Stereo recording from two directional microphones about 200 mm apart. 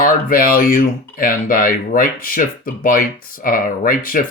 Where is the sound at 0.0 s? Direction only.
45° left (ahead or behind).